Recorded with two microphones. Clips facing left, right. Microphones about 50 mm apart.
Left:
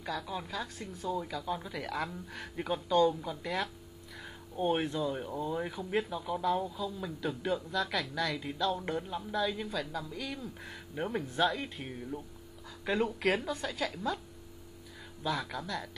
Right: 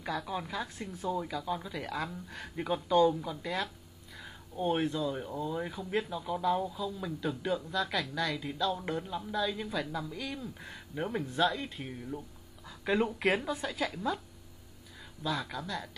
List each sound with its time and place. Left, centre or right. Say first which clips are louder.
0.1 s speech: right 2 dB; centre
6.2 s speech: right 1 dB; centre
9.7 s speech: right 1 dB; centre
15.4 s speech: even; centre